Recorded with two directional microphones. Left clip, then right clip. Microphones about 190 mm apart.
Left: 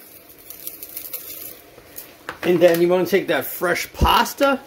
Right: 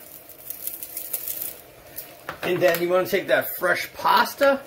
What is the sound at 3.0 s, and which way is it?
Speech, 55° left (ahead or behind).